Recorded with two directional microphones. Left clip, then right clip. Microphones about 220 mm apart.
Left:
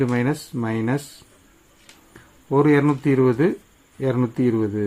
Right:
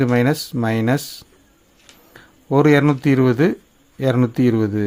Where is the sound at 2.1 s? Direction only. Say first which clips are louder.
Right 2 dB; 45° right (ahead or behind).